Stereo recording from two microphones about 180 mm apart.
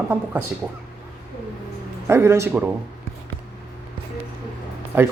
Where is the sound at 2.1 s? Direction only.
15° right (ahead or behind).